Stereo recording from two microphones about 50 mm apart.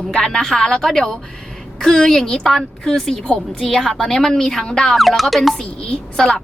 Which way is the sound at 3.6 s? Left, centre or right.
Centre.